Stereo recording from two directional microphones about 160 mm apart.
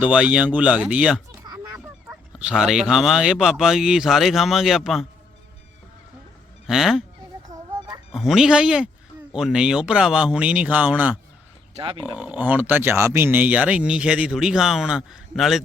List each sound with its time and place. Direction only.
0.0 s speech: 5° right (ahead or behind)
1.4 s honk: 15° right (ahead or behind)
2.0 s speech: 5° right (ahead or behind)
6.7 s speech: centre (ahead or behind)
8.1 s speech: 5° right (ahead or behind)